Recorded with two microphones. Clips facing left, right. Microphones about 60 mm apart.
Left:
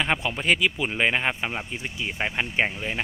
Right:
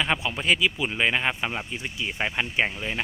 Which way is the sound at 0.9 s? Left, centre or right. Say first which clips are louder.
Left 1 dB; left.